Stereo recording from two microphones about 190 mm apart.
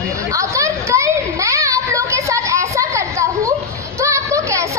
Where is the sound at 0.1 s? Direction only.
15° right (ahead or behind).